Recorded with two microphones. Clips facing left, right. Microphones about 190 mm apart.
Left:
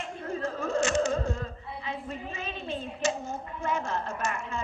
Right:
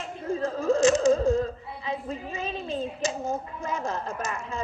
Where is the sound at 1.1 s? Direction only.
35° right (ahead or behind).